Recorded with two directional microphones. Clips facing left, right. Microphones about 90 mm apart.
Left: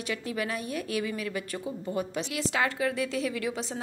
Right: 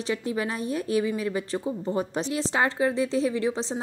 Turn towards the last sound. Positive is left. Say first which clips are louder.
# right 5 dB
turn(degrees=-25)  # may be behind; listen again after turning